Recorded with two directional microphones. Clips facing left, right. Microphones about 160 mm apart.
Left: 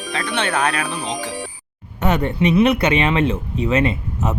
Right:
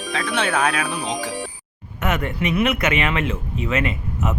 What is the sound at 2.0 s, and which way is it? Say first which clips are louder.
Speech: left 5 dB; 30° left (ahead or behind).